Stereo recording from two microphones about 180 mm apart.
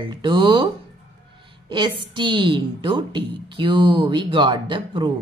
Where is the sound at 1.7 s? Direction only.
25° right (ahead or behind).